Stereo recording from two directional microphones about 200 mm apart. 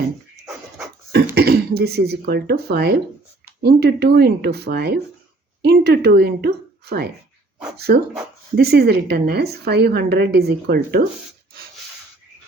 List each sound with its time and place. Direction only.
1.4 s a woman's voice: 55° right (ahead or behind)
8.5 s a woman's voice: 50° right (ahead or behind)